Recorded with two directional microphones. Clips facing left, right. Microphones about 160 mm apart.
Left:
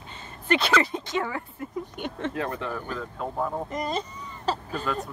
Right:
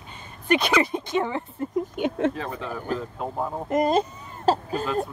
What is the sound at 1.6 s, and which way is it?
Speech, 30° right (ahead or behind).